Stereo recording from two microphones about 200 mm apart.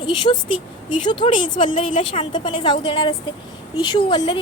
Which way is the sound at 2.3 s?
25° left (ahead or behind).